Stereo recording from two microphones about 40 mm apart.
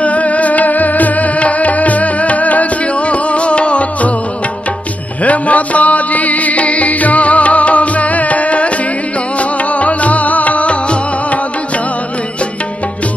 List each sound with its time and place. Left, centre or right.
0.0 s music: left
5.2 s music: left